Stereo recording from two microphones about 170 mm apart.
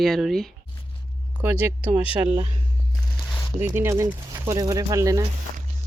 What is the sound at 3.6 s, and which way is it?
Speech, 15° right (ahead or behind).